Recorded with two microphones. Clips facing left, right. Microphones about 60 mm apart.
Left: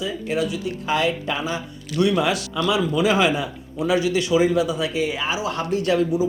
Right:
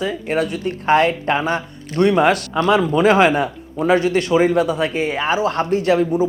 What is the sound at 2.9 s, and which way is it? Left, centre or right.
Speech, right.